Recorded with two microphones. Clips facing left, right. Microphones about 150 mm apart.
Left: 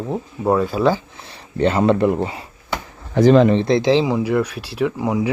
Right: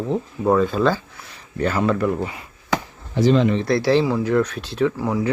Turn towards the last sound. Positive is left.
turn(degrees=15)  # may be behind; listen again after turning